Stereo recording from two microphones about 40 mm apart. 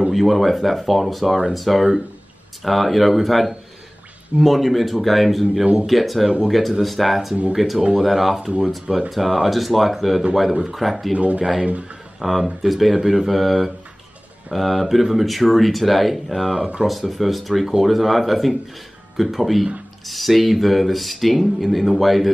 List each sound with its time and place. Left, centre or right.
0.1 s speech: centre
5.4 s speech: centre
5.9 s speech: centre
11.3 s speech: centre
16.5 s speech: right
16.8 s speech: centre